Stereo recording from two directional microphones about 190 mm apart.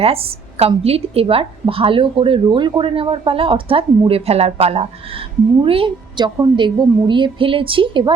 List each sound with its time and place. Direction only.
0.0 s a woman's voice: 30° right (ahead or behind)